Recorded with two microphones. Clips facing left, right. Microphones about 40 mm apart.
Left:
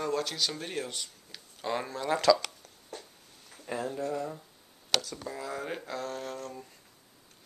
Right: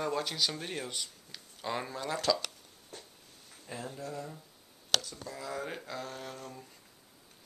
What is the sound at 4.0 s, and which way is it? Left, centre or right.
Speech, left.